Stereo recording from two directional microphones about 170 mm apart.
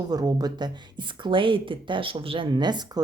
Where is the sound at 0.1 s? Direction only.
25° right (ahead or behind).